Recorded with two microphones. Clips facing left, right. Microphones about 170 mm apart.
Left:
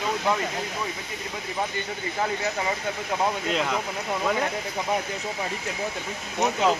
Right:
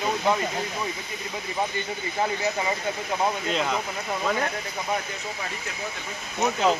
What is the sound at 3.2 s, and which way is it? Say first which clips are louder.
Speech: even; 5° left (ahead or behind).